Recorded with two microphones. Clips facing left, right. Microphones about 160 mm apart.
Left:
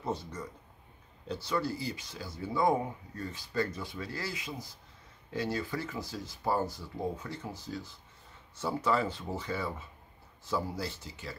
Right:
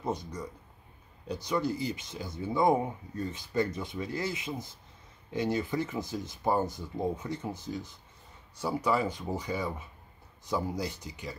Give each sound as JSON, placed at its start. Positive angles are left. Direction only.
{"t": 0.0, "sound": "speech", "side_deg": -15}